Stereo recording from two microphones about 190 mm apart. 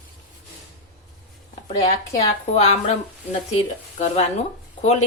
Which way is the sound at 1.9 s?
35° left (ahead or behind).